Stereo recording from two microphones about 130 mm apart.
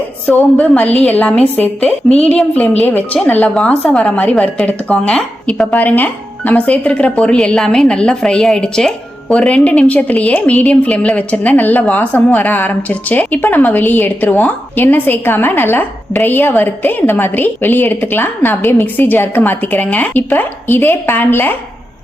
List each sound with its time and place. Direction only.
0.3 s a woman's voice: 10° left (ahead or behind)